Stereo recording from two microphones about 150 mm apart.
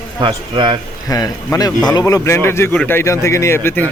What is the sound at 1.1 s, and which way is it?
A man's voice, 25° left (ahead or behind).